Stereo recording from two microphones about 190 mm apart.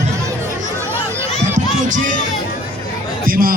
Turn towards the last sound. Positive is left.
turn(degrees=-50)  # may be behind; listen again after turning